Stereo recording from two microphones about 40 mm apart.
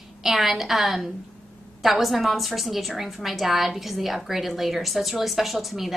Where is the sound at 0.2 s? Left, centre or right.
Centre.